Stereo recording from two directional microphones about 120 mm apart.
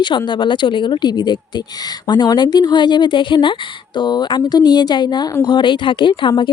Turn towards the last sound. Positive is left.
turn(degrees=40)  # may be behind; listen again after turning